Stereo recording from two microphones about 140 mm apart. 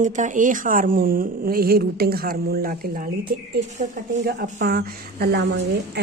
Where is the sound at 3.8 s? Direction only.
60° right (ahead or behind).